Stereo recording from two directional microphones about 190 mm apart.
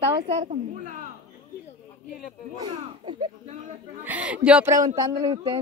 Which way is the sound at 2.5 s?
20° right (ahead or behind).